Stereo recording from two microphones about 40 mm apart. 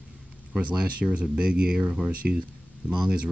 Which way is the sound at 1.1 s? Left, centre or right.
Right.